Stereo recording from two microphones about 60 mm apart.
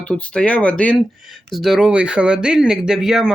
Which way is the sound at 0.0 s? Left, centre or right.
Left.